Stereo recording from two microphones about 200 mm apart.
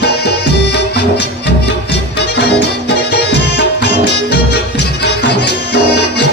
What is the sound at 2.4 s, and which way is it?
Music, 55° left (ahead or behind).